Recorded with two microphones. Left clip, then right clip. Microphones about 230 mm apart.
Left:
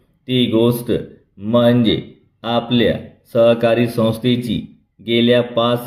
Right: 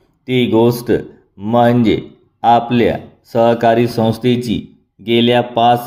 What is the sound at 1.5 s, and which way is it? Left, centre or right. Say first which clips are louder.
A man's voice: right 2 dB; right.